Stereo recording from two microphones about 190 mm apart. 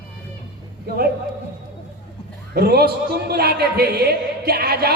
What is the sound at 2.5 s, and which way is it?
A man's voice, 55° right (ahead or behind).